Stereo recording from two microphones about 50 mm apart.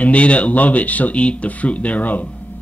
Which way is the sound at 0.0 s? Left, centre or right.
Left.